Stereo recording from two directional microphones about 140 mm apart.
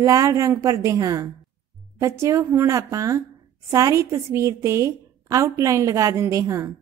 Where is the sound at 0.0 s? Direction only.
25° right (ahead or behind).